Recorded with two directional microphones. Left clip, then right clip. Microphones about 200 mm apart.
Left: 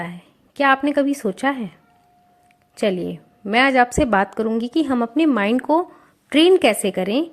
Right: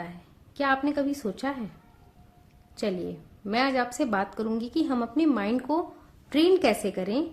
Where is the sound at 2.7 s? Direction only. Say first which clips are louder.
Left 9 dB; 35° left (ahead or behind).